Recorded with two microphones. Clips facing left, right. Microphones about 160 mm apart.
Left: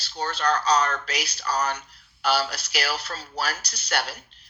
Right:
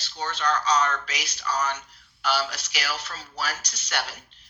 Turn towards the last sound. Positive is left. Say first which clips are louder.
# left 3 dB
turn(degrees=35)  # may be behind; listen again after turning